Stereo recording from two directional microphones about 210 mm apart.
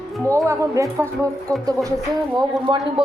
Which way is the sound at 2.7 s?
25° right (ahead or behind).